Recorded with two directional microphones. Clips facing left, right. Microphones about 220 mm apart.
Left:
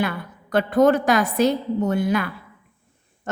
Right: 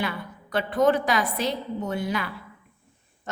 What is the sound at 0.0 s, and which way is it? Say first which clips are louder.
A woman's voice: left 5 dB; 50° left (ahead or behind).